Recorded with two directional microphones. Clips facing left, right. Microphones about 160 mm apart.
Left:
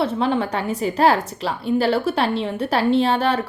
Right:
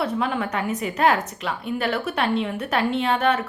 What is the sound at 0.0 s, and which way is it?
A woman's voice, 30° left (ahead or behind).